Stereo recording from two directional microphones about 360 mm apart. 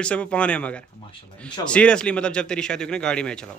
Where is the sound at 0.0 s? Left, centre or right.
Centre.